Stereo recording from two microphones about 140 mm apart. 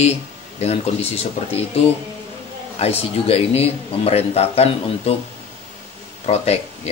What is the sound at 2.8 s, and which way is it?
Speech, 45° left (ahead or behind).